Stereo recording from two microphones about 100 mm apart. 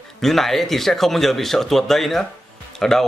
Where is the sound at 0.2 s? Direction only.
Centre (ahead or behind).